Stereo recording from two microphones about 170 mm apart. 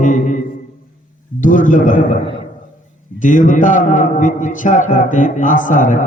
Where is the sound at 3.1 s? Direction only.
50° left (ahead or behind).